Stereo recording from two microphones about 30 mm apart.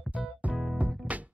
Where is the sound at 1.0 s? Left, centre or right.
Centre.